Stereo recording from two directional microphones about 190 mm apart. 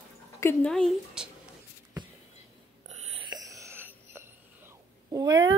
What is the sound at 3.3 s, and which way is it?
Whispering, 15° right (ahead or behind).